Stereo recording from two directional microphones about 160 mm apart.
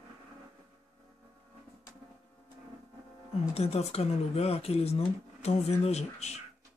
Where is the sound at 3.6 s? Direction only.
40° left (ahead or behind).